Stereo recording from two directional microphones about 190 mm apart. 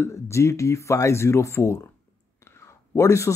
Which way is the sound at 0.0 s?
15° left (ahead or behind).